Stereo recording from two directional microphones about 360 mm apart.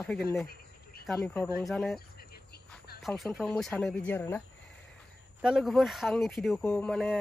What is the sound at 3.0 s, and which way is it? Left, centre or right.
Speech, centre.